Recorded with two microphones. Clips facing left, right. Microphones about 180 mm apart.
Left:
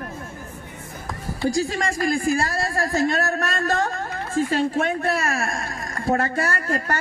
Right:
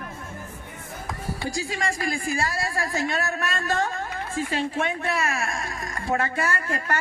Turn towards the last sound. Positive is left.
turn(degrees=40)  # may be behind; listen again after turning